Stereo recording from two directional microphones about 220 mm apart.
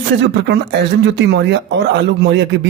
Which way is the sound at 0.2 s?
50° right (ahead or behind).